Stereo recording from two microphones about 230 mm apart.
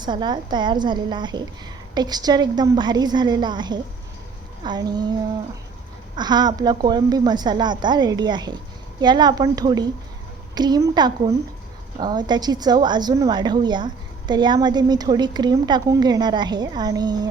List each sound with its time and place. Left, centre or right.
0.0 s a woman's voice: centre
6.1 s a woman's voice: centre